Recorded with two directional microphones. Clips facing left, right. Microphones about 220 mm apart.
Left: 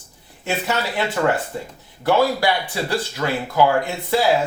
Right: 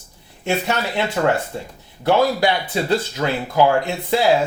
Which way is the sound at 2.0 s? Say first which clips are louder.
Right 1 dB; 20° right (ahead or behind).